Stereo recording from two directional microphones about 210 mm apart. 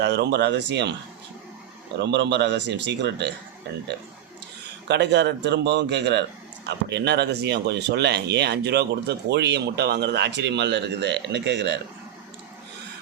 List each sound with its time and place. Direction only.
0.0 s speech: 55° right (ahead or behind)
2.0 s speech: 55° right (ahead or behind)
4.9 s speech: 55° right (ahead or behind)